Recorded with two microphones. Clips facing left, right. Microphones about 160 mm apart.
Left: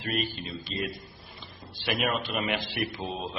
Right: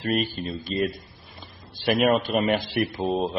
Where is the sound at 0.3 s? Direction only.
50° right (ahead or behind).